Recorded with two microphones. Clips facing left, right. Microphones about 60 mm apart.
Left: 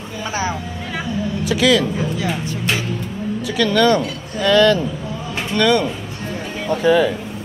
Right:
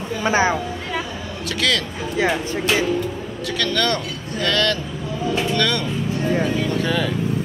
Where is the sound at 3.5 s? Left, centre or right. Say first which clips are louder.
Left 6 dB; centre.